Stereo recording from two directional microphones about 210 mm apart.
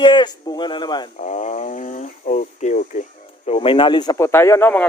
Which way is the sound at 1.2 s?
35° left (ahead or behind).